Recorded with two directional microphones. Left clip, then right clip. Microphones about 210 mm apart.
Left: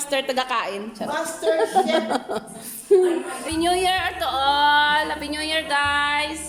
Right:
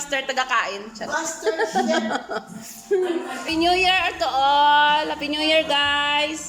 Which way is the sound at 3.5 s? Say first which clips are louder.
Right 2 dB; 5° right (ahead or behind).